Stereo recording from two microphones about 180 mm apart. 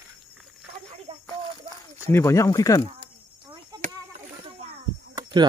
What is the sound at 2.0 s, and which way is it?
Speech, 15° left (ahead or behind).